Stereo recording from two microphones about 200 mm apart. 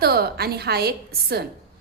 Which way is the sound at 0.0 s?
50° right (ahead or behind).